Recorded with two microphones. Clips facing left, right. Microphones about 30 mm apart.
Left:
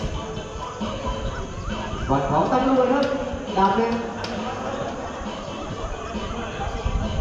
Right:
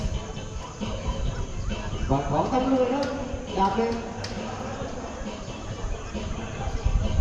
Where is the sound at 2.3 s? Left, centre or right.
Left.